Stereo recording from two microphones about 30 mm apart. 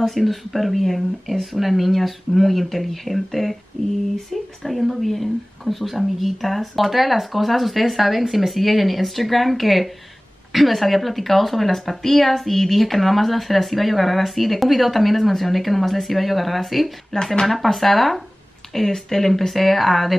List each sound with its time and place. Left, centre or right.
0.0 s speech: centre
17.1 s speech: centre
17.5 s speech: centre